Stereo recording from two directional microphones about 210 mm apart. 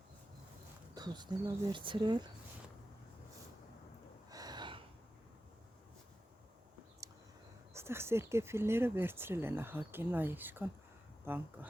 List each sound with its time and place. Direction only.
0.9 s speech: 20° right (ahead or behind)
4.3 s gasp: 20° right (ahead or behind)
7.7 s speech: 10° right (ahead or behind)